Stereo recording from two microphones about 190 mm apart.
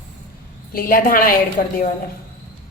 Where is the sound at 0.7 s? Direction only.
50° left (ahead or behind).